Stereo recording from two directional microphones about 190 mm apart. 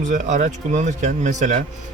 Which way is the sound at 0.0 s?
40° right (ahead or behind).